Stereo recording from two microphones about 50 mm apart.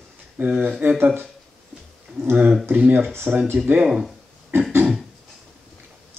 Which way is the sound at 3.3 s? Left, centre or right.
Right.